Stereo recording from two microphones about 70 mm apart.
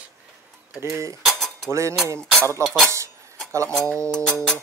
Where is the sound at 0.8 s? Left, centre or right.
Right.